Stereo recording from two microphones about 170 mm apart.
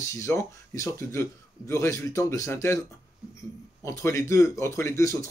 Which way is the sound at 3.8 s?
15° left (ahead or behind).